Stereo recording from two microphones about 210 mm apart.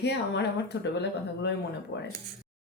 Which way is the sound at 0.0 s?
55° left (ahead or behind).